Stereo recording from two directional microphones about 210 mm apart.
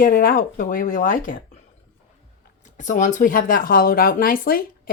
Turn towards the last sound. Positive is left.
turn(degrees=45)  # may be behind; listen again after turning